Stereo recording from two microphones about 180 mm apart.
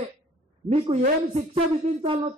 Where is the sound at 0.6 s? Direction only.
Centre (ahead or behind).